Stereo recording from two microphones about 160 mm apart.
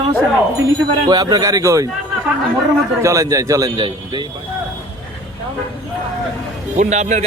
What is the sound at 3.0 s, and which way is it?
A man's voice, 20° right (ahead or behind).